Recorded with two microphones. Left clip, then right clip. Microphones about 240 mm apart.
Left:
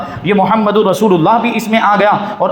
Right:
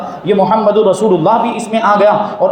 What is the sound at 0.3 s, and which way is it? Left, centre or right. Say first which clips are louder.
A man's voice: right 1 dB; left.